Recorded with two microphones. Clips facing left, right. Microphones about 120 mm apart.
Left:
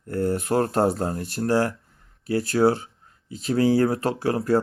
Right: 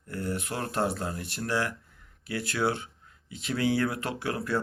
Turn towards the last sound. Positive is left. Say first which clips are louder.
# left 8 dB
turn(degrees=35)  # may be behind; listen again after turning